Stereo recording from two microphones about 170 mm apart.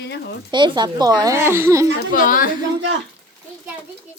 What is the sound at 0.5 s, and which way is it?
Speech, 25° right (ahead or behind).